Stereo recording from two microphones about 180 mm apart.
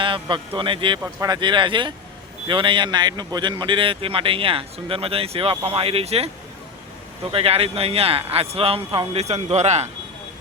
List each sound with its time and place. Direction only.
0.0 s a man's voice: 25° right (ahead or behind)